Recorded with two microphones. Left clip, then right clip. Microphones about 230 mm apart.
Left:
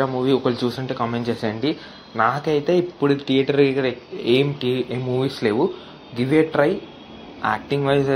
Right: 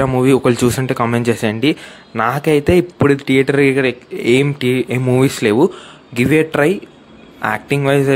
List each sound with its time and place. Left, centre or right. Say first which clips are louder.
0.0 s speech: right 7 dB; right